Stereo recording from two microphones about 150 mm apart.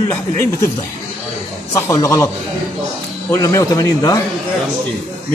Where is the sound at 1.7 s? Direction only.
20° left (ahead or behind).